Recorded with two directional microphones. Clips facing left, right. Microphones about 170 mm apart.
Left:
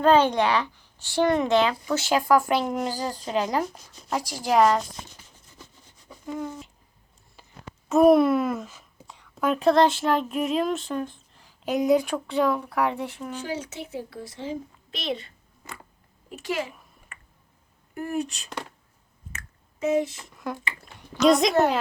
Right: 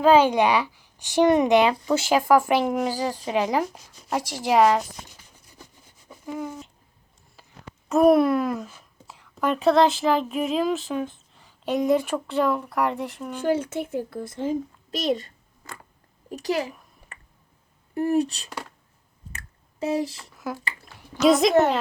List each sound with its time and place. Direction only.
0.0 s speech: 5° right (ahead or behind)
6.1 s a sound: 5° right (ahead or behind)
7.9 s speech: centre (ahead or behind)
13.4 s a woman's voice: 55° right (ahead or behind)
16.3 s speech: 40° right (ahead or behind)
17.1 s a sound: 35° right (ahead or behind)
17.9 s speech: 35° right (ahead or behind)
19.3 s finger snapping: 35° right (ahead or behind)
20.3 s a sound: 5° right (ahead or behind)